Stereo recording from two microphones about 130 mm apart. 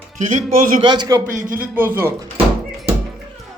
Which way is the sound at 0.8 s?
35° right (ahead or behind).